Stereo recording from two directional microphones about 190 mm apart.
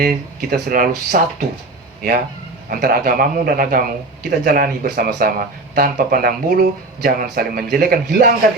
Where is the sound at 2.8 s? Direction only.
50° right (ahead or behind).